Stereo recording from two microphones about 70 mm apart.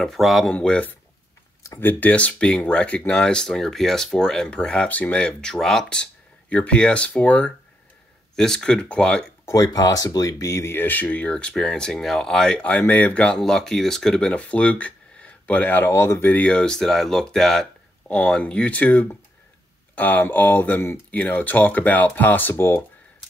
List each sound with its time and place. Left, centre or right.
0.0 s speech: centre
0.5 s speech: centre
1.8 s speech: left
8.4 s speech: centre
9.5 s speech: left
15.9 s speech: left
16.3 s speech: left; by 17.6 s centre
18.0 s speech: centre; by 22.8 s left